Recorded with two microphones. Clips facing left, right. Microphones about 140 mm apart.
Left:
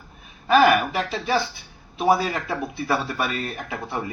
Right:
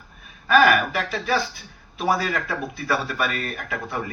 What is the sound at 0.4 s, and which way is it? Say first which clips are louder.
Speech: left 1 dB; 20° left (ahead or behind).